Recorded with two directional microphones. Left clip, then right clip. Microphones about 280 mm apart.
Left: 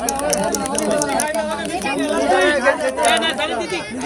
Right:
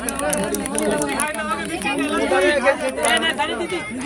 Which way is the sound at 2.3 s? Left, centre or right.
Left.